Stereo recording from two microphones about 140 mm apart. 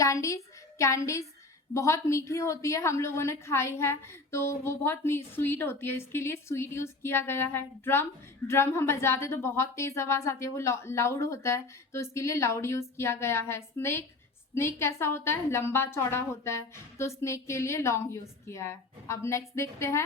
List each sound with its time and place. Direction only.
0.0 s a woman's voice: 20° left (ahead or behind)